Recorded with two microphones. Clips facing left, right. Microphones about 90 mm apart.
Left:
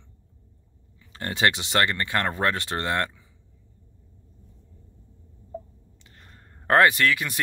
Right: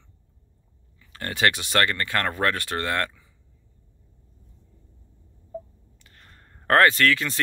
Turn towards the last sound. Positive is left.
turn(degrees=15)  # may be behind; listen again after turning